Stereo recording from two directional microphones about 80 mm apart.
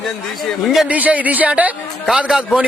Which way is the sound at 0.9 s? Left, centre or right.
Centre.